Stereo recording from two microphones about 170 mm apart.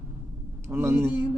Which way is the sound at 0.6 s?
15° right (ahead or behind).